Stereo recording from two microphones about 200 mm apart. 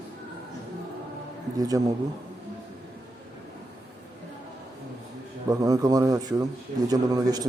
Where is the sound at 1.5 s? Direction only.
20° right (ahead or behind).